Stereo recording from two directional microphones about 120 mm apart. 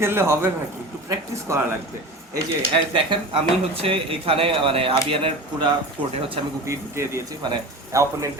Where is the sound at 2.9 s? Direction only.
45° right (ahead or behind).